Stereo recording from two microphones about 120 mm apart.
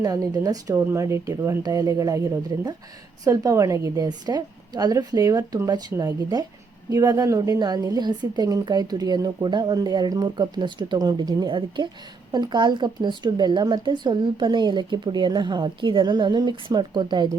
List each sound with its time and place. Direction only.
0.0 s a woman's voice: 30° right (ahead or behind)